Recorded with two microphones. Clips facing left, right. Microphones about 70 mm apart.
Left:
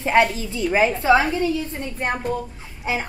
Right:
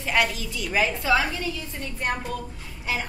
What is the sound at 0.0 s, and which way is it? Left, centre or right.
A woman's voice, left.